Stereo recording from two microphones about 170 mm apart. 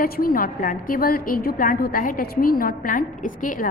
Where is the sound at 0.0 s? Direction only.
55° left (ahead or behind).